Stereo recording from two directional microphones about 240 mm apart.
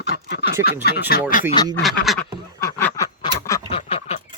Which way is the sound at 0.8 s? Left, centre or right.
Left.